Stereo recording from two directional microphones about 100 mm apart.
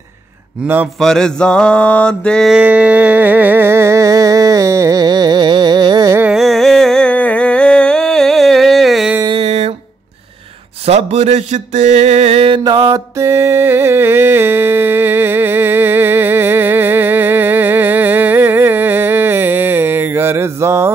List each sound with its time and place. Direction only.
0.9 s mantra: 5° left (ahead or behind)
2.5 s music: 10° right (ahead or behind); by 6.1 s 45° right (ahead or behind)
6.3 s a sound: centre (ahead or behind)
9.3 s a sound: 90° right
10.9 s music: 90° right; by 12.6 s 70° right (ahead or behind)
12.6 s music: 40° right (ahead or behind)
13.2 s music: 25° right (ahead or behind)